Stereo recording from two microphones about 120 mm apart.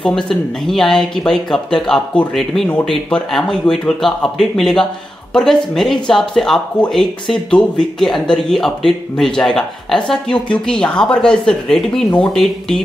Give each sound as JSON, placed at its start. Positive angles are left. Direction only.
{"t": 0.0, "sound": "speech", "side_deg": 0}